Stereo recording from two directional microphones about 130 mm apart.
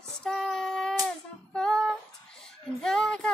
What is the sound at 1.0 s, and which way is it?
Music, 5° left (ahead or behind).